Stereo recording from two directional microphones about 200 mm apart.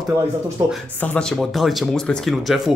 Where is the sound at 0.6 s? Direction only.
15° right (ahead or behind).